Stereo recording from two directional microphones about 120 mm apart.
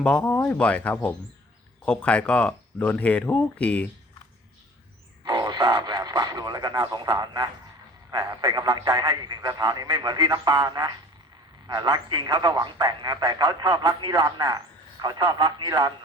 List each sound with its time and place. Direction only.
0.0 s speech: 10° left (ahead or behind)
5.2 s frog: 35° right (ahead or behind)
5.8 s a man's voice: 35° right (ahead or behind)